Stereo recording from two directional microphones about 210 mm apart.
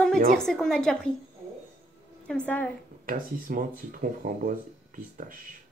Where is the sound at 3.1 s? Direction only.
40° right (ahead or behind).